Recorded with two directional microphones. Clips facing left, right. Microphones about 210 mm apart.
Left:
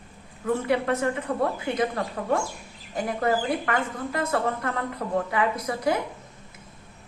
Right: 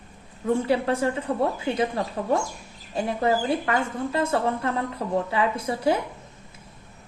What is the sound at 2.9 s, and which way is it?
A woman's voice, 25° right (ahead or behind).